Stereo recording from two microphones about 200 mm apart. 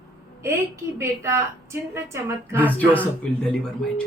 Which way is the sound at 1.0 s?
15° right (ahead or behind).